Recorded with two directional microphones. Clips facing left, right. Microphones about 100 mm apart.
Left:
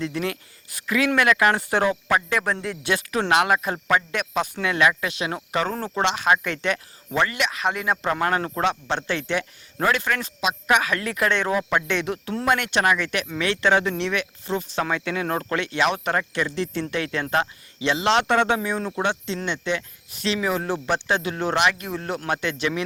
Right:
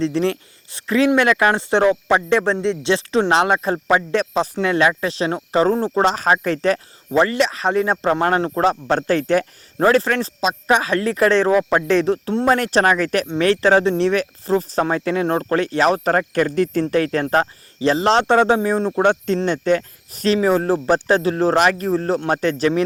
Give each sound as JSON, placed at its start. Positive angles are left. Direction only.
{"t": 0.0, "sound": "speech", "side_deg": -30}
{"t": 19.0, "sound": "speech", "side_deg": -45}